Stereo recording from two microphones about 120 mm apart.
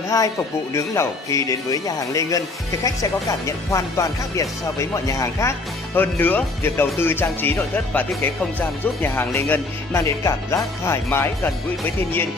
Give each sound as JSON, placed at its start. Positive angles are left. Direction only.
{"t": 0.7, "sound": "speech", "side_deg": 25}
{"t": 5.9, "sound": "speech", "side_deg": 15}